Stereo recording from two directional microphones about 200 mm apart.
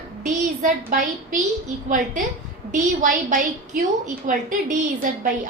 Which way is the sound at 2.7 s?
40° right (ahead or behind).